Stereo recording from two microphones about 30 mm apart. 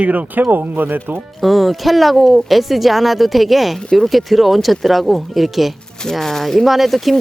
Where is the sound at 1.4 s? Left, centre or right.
Centre.